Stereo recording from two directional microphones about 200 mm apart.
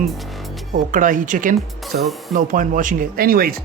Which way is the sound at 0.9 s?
40° right (ahead or behind).